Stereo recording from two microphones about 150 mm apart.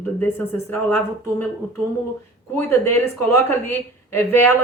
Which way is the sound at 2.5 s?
15° left (ahead or behind).